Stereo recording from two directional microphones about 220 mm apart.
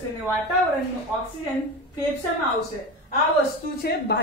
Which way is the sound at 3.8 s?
45° left (ahead or behind).